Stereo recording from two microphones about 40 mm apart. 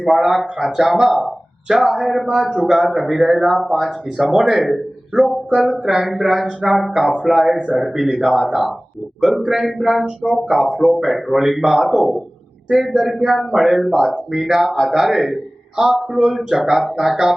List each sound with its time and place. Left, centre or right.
0.1 s speech: centre
5.5 s speech: centre
9.6 s speech: centre
12.7 s speech: centre
13.0 s speech: centre